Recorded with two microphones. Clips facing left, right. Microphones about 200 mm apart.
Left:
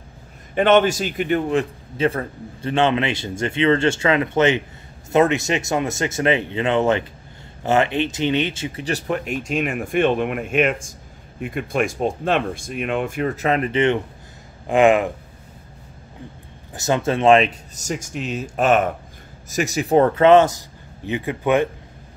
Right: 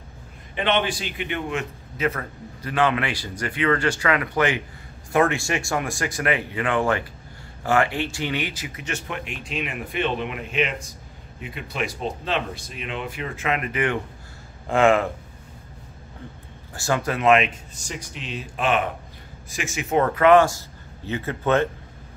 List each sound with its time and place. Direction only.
0.6 s a man's voice: 45° left (ahead or behind); by 15.0 s 15° left (ahead or behind)
16.7 s a man's voice: 20° left (ahead or behind)